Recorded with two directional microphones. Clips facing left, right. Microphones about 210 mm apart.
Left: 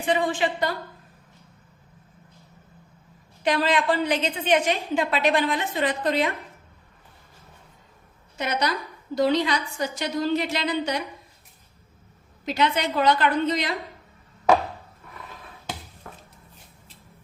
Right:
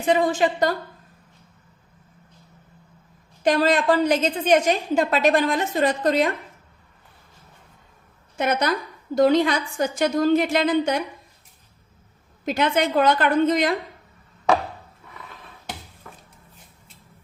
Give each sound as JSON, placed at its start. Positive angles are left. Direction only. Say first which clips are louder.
{"t": 0.0, "sound": "a woman's voice", "louder": "right 4 dB", "side_deg": -40}
{"t": 3.4, "sound": "a woman's voice", "louder": "right 4 dB", "side_deg": -45}
{"t": 8.4, "sound": "a woman's voice", "louder": "right 4 dB", "side_deg": -50}
{"t": 12.5, "sound": "a woman's voice", "louder": "right 3 dB", "side_deg": -50}